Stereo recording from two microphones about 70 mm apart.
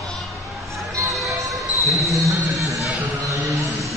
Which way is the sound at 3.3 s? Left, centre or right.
Right.